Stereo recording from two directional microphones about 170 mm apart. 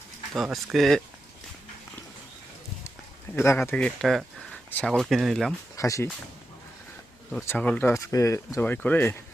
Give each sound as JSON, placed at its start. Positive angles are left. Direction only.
{"t": 0.3, "sound": "speech", "side_deg": 0}
{"t": 3.3, "sound": "speech", "side_deg": 15}
{"t": 5.7, "sound": "speech", "side_deg": 20}
{"t": 7.4, "sound": "speech", "side_deg": 10}